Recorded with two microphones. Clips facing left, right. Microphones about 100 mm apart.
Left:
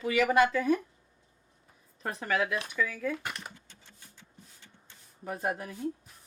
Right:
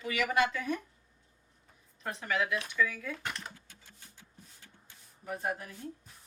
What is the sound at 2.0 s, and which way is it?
Speech, 45° left (ahead or behind).